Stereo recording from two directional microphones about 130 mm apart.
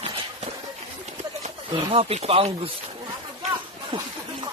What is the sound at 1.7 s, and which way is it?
Speech, 40° right (ahead or behind).